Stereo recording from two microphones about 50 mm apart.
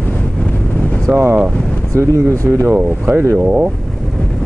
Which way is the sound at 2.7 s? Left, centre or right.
Right.